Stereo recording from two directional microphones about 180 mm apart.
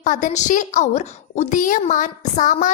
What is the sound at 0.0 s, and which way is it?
A woman's voice, 45° left (ahead or behind).